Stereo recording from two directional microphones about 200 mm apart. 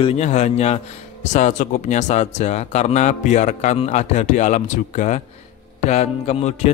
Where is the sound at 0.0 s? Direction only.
30° left (ahead or behind).